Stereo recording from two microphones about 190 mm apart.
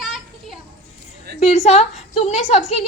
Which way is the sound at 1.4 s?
35° left (ahead or behind).